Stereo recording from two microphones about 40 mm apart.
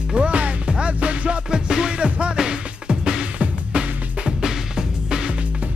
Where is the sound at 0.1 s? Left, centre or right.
Right.